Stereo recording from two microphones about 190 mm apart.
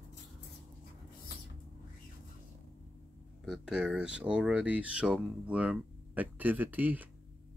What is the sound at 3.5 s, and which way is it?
Speech, 5° right (ahead or behind).